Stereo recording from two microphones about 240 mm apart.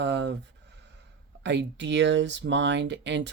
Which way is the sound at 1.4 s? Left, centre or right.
Right.